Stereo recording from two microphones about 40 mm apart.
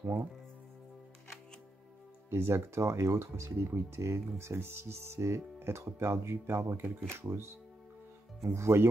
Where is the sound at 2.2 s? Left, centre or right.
Right.